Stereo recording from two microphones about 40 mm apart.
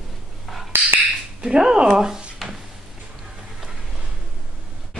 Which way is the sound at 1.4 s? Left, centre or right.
Centre.